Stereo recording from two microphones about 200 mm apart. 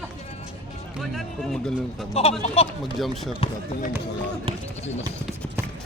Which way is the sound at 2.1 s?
30° left (ahead or behind).